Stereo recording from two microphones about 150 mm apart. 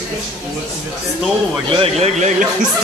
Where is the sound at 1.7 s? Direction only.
40° right (ahead or behind).